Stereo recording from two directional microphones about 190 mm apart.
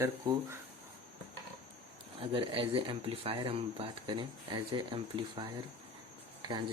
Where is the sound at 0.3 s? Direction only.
20° right (ahead or behind).